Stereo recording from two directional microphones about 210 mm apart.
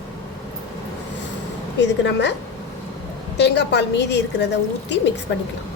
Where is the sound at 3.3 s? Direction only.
55° left (ahead or behind).